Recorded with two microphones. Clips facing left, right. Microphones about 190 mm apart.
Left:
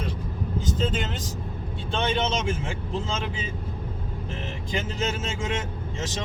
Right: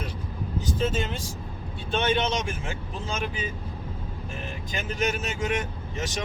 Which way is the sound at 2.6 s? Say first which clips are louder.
Left 3 dB; 25° left (ahead or behind).